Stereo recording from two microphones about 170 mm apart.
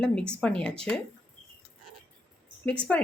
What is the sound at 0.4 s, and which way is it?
Speech, 5° left (ahead or behind).